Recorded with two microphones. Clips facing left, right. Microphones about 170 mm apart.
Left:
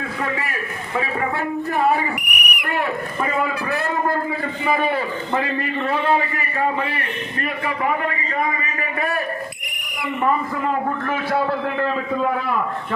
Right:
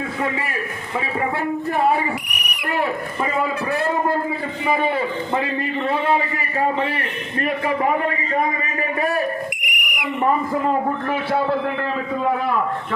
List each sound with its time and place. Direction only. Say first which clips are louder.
2.1 s a sound: left 1 dB; 30° right (ahead or behind)
4.6 s a man's voice: right 1 dB; 20° right (ahead or behind)
9.6 s owl: right 1 dB; 20° right (ahead or behind)